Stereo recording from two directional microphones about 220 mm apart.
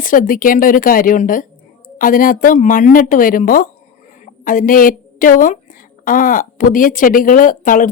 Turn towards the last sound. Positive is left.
turn(degrees=35)  # may be behind; listen again after turning